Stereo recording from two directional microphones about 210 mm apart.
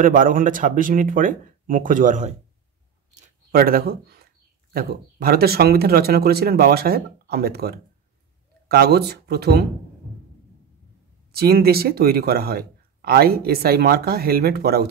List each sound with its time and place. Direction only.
0.0 s speech: 40° right (ahead or behind)
3.2 s a sound: 45° right (ahead or behind)
4.7 s speech: 45° right (ahead or behind)
11.3 s speech: 45° right (ahead or behind)